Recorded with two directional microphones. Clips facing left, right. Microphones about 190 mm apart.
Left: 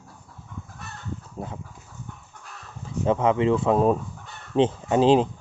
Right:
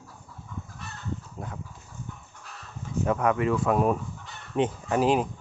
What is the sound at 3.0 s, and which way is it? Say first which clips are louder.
Speech: left 4 dB; 25° left (ahead or behind).